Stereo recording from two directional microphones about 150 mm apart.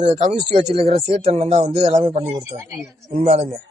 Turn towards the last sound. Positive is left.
turn(degrees=-50)  # may be behind; listen again after turning